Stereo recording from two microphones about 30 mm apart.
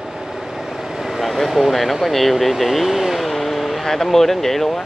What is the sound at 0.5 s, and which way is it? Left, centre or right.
Vehicle, centre.